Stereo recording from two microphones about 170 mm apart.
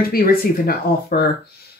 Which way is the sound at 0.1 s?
60° left (ahead or behind).